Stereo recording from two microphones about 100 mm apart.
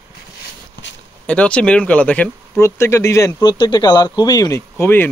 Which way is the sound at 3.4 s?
50° left (ahead or behind).